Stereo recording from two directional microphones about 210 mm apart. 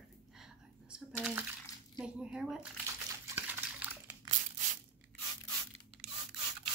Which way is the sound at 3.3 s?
10° right (ahead or behind).